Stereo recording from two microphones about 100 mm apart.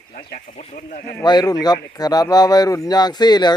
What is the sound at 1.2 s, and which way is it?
Speech, 45° left (ahead or behind).